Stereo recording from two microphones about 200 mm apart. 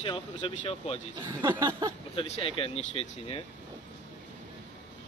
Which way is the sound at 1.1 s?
20° right (ahead or behind).